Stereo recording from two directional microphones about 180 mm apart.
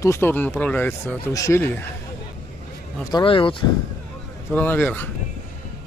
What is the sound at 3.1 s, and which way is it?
Speech, 30° left (ahead or behind).